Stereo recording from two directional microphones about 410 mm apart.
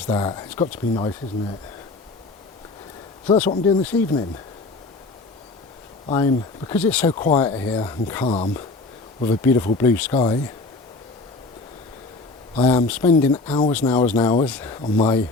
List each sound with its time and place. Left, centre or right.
0.1 s speech: centre
3.2 s speech: centre
3.5 s speech: centre
6.1 s speech: centre
12.6 s speech: centre
13.0 s speech: centre